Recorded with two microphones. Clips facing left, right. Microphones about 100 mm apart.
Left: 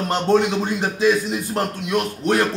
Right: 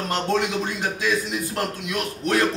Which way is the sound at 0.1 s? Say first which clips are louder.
Left 6 dB; 30° left (ahead or behind).